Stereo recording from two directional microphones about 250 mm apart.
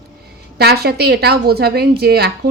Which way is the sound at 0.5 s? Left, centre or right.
Right.